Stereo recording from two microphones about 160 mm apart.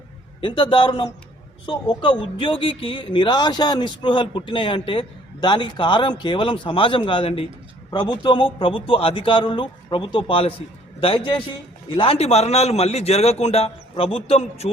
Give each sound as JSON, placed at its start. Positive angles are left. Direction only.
{"t": 0.4, "sound": "speech", "side_deg": 30}